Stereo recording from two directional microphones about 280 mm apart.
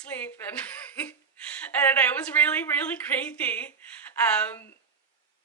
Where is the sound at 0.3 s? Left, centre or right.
Centre.